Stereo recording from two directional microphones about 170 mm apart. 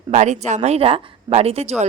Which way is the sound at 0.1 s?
45° right (ahead or behind).